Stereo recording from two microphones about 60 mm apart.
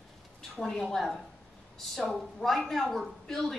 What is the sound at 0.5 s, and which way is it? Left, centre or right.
A woman's voice, centre.